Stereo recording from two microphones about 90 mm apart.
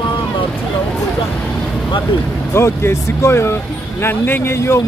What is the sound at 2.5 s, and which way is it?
A man's voice, 30° left (ahead or behind).